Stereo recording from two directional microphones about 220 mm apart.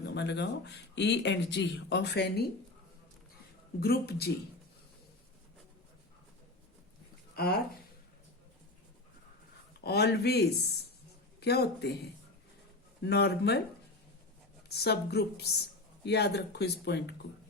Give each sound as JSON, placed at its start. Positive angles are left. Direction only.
{"t": 0.0, "sound": "speech", "side_deg": 50}
{"t": 3.8, "sound": "speech", "side_deg": 45}
{"t": 7.3, "sound": "speech", "side_deg": 45}
{"t": 9.8, "sound": "speech", "side_deg": 45}
{"t": 14.7, "sound": "speech", "side_deg": 45}